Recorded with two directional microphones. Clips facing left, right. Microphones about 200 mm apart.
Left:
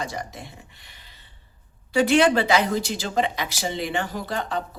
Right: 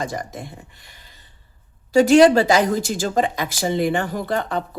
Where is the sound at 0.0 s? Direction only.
50° right (ahead or behind).